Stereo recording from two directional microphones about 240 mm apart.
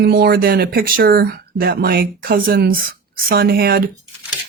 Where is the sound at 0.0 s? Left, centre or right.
Right.